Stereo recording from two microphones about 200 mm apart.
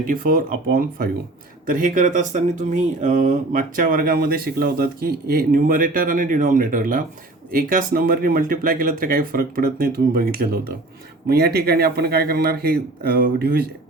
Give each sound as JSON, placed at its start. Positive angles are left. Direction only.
{"t": 0.0, "sound": "speech", "side_deg": -45}